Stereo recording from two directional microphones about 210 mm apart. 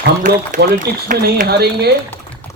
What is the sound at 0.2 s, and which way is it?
A man's voice, 40° right (ahead or behind).